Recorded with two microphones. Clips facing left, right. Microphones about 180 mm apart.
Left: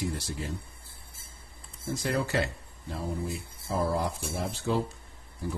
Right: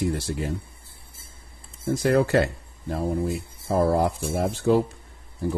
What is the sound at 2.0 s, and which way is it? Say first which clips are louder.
Speech: right 9 dB; 55° right (ahead or behind).